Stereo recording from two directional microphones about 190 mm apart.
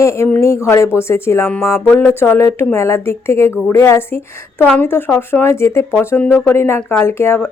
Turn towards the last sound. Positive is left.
turn(degrees=10)  # may be behind; listen again after turning